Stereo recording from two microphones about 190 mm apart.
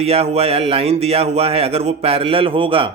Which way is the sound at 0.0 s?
30° right (ahead or behind).